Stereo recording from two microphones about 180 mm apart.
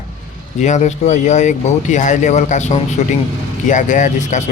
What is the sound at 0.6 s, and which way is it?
Speech, 40° left (ahead or behind).